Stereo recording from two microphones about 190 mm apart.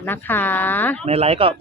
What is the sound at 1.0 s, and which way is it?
Speech, 35° right (ahead or behind).